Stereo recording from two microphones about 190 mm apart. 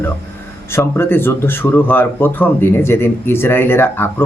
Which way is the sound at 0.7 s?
10° left (ahead or behind).